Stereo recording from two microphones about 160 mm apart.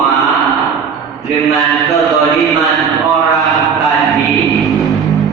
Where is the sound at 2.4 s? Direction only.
Centre (ahead or behind).